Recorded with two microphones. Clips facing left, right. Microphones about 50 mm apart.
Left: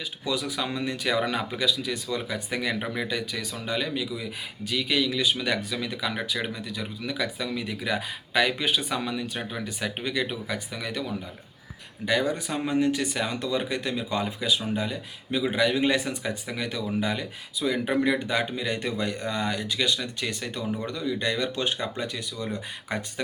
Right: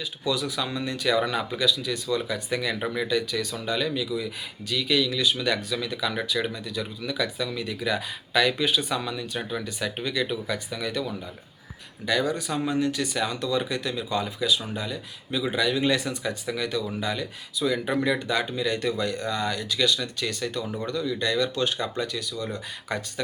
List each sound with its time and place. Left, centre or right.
0.3 s speech: left